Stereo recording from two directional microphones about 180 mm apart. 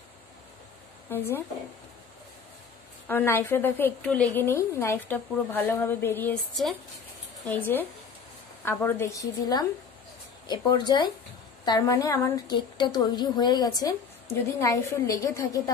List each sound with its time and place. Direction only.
3.1 s a woman's voice: 10° left (ahead or behind)
7.4 s a woman's voice: 10° left (ahead or behind)